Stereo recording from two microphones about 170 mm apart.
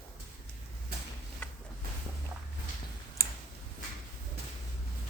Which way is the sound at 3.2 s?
20° left (ahead or behind).